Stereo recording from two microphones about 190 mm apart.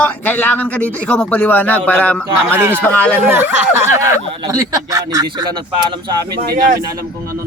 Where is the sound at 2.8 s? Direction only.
10° left (ahead or behind).